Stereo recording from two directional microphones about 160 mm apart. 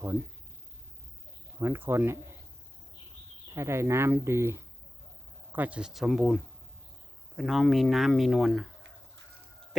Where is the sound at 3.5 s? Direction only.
15° right (ahead or behind).